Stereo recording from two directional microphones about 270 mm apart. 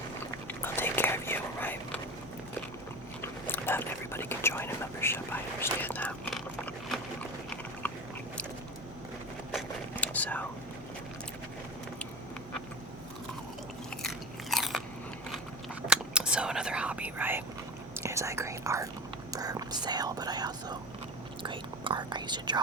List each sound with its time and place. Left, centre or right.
0.4 s whispering: centre
3.2 s whispering: centre
7.5 s biting: centre
9.5 s whispering: centre
14.0 s biting: centre
15.9 s whispering: centre